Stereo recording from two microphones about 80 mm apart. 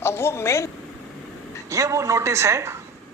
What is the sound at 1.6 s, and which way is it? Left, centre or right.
A woman's voice, right.